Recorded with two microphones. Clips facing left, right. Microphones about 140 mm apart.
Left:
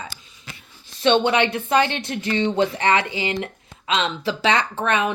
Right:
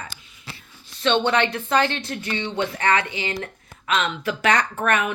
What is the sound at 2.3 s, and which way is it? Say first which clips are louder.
Speech: left 6 dB; 35° left (ahead or behind).